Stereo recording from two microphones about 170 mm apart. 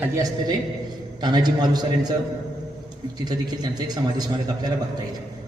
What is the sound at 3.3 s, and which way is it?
Speech, 25° right (ahead or behind).